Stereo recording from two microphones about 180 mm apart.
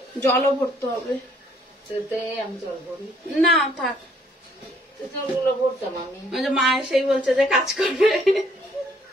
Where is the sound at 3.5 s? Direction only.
Centre (ahead or behind).